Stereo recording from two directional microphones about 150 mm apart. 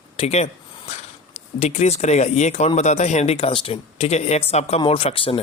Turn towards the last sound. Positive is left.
turn(degrees=40)  # may be behind; listen again after turning